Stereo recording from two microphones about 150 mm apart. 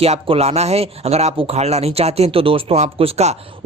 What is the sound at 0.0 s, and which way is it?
Speech, 40° right (ahead or behind).